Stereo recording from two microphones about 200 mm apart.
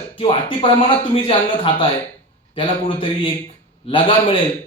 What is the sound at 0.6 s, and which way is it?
Speech, 25° left (ahead or behind).